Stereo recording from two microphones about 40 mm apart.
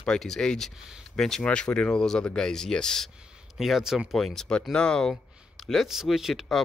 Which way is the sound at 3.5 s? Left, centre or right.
Centre.